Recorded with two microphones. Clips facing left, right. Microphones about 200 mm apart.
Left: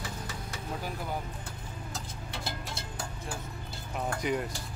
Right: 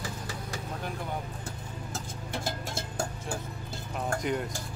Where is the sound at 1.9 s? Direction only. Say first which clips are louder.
Right 6 dB; 50° right (ahead or behind).